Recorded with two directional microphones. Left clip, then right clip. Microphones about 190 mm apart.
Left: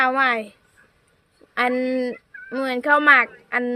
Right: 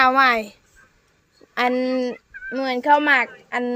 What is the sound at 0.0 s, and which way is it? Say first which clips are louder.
Speech: right 3 dB; 15° right (ahead or behind).